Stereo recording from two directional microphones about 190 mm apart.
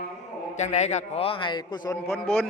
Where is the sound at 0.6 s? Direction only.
35° left (ahead or behind).